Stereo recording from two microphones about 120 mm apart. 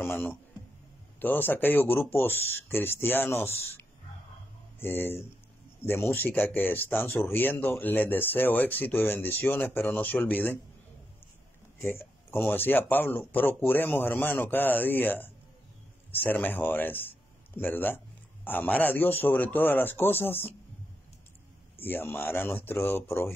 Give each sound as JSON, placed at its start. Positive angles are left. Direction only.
{"t": 0.0, "sound": "speech", "side_deg": 20}
{"t": 11.8, "sound": "a man's voice", "side_deg": 20}
{"t": 21.7, "sound": "speech", "side_deg": 15}